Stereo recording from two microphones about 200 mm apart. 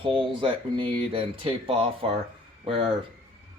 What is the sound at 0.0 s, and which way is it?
Speech, 25° right (ahead or behind).